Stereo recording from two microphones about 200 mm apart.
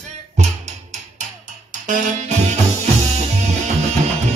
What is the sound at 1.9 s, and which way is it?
Music, 35° right (ahead or behind).